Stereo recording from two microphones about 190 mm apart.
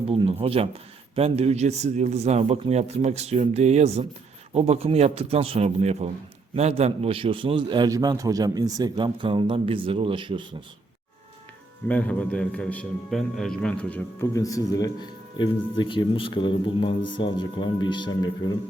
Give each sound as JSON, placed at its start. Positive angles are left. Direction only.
{"t": 0.1, "sound": "a man's voice", "side_deg": -30}
{"t": 11.9, "sound": "a man's voice", "side_deg": 5}